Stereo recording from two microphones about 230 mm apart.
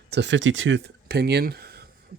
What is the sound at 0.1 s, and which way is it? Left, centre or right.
Speech, right.